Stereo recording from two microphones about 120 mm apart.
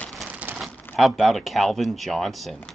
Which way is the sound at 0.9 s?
Centre (ahead or behind).